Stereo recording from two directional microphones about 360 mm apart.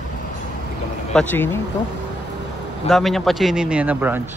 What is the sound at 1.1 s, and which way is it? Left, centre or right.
Speech, centre.